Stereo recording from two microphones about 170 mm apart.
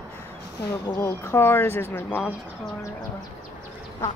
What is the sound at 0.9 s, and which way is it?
Speech, 15° left (ahead or behind).